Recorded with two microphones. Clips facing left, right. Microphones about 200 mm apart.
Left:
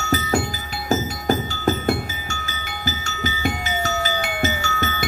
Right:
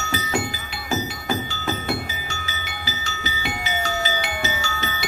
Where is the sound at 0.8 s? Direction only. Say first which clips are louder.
Left 5 dB; 40° left (ahead or behind).